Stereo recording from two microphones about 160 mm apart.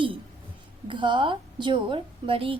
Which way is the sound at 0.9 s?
30° right (ahead or behind).